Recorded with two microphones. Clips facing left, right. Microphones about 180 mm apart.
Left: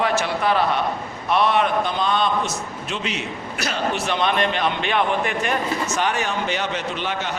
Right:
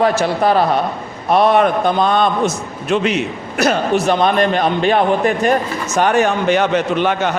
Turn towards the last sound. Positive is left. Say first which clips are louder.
# right 10 dB
turn(degrees=-55)  # may be behind; listen again after turning